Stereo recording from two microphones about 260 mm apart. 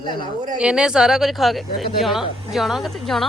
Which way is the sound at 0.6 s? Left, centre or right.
Centre.